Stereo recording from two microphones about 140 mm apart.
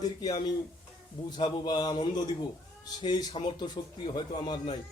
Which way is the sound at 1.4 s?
35° left (ahead or behind).